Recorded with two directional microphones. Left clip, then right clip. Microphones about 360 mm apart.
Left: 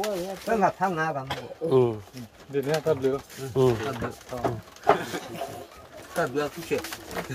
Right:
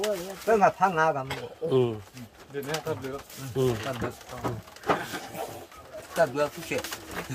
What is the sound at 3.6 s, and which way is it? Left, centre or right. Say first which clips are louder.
Speech: left 4 dB; centre.